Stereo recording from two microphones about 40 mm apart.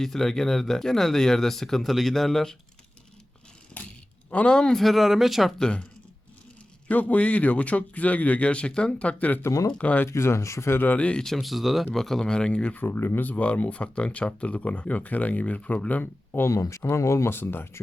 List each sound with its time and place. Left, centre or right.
0.0 s speech: centre
4.3 s speech: left
4.5 s speech: centre
4.8 s speech: centre
6.8 s speech: left
10.2 s speech: left
10.8 s speech: left
11.3 s speech: centre
12.2 s speech: left
12.7 s speech: left
13.2 s speech: left
16.3 s speech: left